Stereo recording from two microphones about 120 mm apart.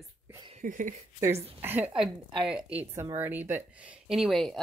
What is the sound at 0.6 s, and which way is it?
Speech, 90° right.